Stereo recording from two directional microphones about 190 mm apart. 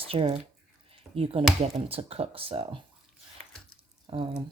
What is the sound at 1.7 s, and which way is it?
Speech, 30° right (ahead or behind).